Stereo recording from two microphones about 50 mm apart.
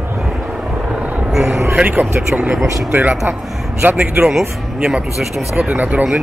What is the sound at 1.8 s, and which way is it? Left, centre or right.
Speech, centre.